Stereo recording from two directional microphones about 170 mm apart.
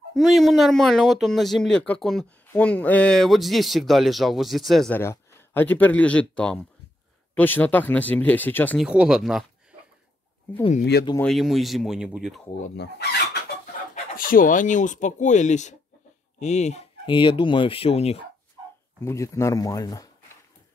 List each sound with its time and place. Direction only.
0.1 s speech: centre (ahead or behind)
8.7 s speech: 5° right (ahead or behind)
10.8 s speech: 70° left (ahead or behind)
11.1 s speech: centre (ahead or behind)
12.7 s chicken: 80° left
13.9 s speech: 55° left (ahead or behind)
17.0 s speech: 30° left (ahead or behind)
18.9 s speech: 15° left (ahead or behind)